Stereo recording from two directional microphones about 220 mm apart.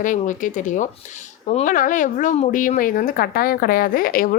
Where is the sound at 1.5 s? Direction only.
35° left (ahead or behind).